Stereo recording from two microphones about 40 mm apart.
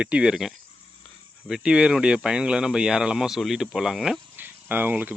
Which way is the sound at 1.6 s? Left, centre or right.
Right.